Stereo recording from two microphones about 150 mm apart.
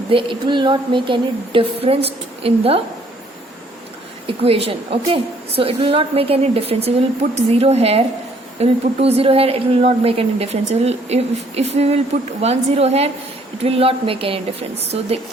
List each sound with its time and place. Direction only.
0.1 s a woman's voice: 35° right (ahead or behind)
4.3 s a woman's voice: 40° right (ahead or behind)